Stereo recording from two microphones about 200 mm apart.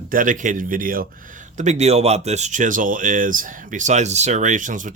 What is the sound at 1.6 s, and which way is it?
Speech, 35° right (ahead or behind).